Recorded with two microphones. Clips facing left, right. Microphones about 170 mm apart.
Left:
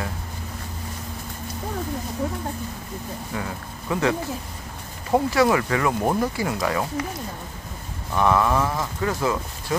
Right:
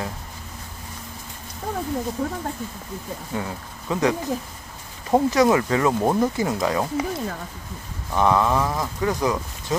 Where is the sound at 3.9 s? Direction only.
15° right (ahead or behind).